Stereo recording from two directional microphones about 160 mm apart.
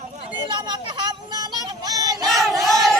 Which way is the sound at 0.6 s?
30° right (ahead or behind).